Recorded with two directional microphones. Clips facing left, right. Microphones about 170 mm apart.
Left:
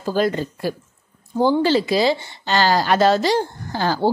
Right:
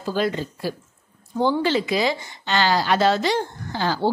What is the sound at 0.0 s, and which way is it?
Speech, 45° left (ahead or behind).